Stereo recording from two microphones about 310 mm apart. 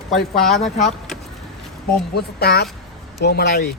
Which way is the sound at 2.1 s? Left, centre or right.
Left.